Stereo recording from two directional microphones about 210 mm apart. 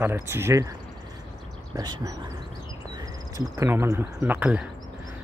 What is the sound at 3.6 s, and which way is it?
Speech, 15° right (ahead or behind).